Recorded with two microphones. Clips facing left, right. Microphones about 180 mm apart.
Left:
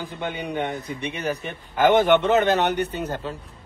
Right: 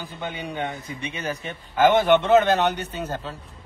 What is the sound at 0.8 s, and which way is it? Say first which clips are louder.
Speech: left 3 dB; 60° left (ahead or behind).